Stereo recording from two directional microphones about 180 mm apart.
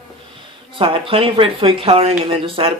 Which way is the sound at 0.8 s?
30° right (ahead or behind).